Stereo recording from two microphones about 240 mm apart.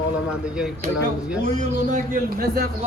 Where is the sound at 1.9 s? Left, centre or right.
Right.